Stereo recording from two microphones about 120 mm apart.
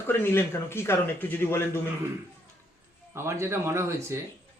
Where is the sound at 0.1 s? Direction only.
20° left (ahead or behind).